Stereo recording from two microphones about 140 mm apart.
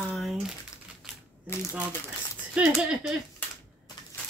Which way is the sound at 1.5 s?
15° left (ahead or behind).